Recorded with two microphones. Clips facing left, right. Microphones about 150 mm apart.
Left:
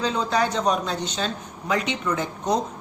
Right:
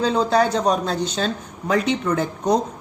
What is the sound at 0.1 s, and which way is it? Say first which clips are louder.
Speech: right 5 dB; 35° right (ahead or behind).